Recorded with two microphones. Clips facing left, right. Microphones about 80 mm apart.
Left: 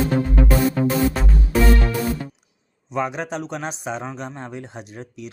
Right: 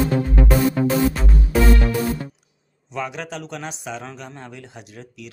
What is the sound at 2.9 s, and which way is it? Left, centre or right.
Speech, left.